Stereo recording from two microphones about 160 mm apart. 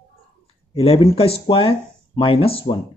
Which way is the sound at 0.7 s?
35° left (ahead or behind).